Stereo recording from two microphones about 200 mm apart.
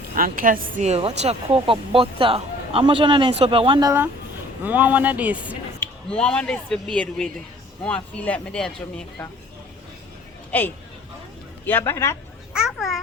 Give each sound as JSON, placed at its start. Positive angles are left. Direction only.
{"t": 0.1, "sound": "speech", "side_deg": -45}
{"t": 5.8, "sound": "speech", "side_deg": 5}
{"t": 11.6, "sound": "speech", "side_deg": 10}
{"t": 12.5, "sound": "speech", "side_deg": 0}